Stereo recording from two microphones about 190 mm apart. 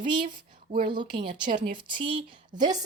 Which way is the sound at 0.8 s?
25° right (ahead or behind).